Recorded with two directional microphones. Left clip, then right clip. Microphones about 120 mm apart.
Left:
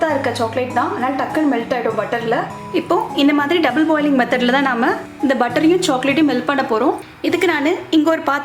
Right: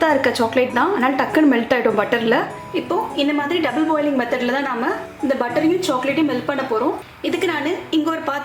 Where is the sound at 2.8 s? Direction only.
35° left (ahead or behind).